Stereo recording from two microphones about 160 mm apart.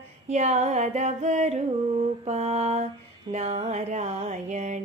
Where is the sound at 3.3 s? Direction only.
40° right (ahead or behind).